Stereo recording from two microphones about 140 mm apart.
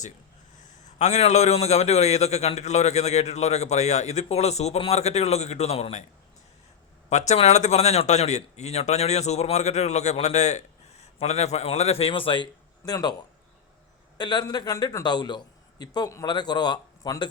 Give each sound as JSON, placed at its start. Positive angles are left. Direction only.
{"t": 0.9, "sound": "speech", "side_deg": 55}
{"t": 7.1, "sound": "speech", "side_deg": 55}
{"t": 14.2, "sound": "a man's voice", "side_deg": 30}